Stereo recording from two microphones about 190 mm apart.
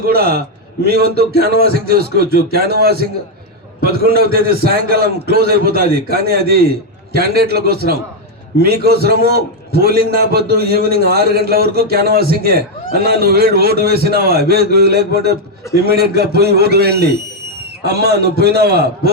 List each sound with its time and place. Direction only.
0.0 s a man's voice: 55° right (ahead or behind)